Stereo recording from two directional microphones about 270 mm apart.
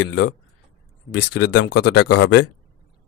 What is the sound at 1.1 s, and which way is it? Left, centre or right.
Speech, left.